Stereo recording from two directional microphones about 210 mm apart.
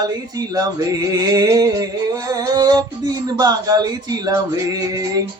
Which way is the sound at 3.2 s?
20° right (ahead or behind).